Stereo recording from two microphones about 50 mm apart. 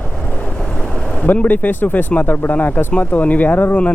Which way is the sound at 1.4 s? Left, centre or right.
Left.